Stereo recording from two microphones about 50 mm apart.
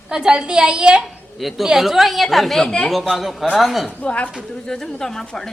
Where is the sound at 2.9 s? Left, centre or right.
Centre.